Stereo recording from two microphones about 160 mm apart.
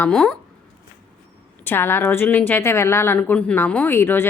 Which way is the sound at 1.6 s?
15° left (ahead or behind).